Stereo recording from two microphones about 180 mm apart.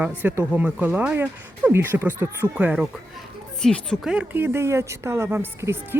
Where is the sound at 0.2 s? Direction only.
10° right (ahead or behind).